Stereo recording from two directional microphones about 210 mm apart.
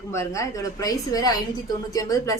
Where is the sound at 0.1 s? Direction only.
15° left (ahead or behind).